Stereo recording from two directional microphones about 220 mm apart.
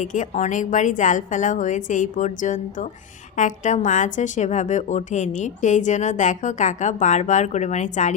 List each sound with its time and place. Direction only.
0.0 s a woman's voice: 35° left (ahead or behind)